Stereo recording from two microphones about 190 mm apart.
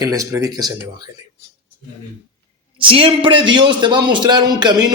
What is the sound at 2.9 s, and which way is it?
A man's voice, 30° right (ahead or behind).